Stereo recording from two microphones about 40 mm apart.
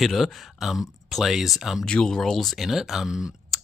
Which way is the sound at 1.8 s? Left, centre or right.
Centre.